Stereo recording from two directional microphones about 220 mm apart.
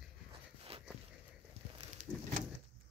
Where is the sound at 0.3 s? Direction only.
25° right (ahead or behind).